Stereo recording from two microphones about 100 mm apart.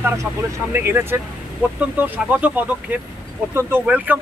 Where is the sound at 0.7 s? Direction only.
25° right (ahead or behind).